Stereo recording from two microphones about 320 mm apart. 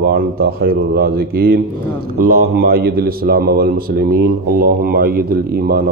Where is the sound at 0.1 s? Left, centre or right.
Right.